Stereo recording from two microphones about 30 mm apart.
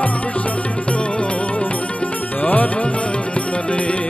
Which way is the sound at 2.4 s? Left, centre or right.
Left.